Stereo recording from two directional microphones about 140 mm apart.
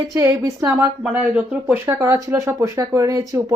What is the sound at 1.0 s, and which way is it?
Speech, 10° right (ahead or behind).